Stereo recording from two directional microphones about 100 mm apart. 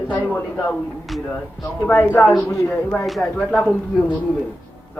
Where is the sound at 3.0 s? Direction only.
Centre (ahead or behind).